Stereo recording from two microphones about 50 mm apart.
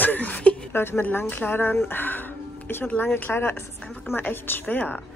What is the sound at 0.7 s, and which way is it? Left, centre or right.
Speech, left.